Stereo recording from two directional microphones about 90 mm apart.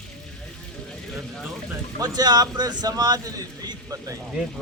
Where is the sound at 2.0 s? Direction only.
50° right (ahead or behind).